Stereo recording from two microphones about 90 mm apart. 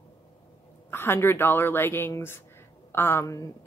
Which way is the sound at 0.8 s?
25° left (ahead or behind).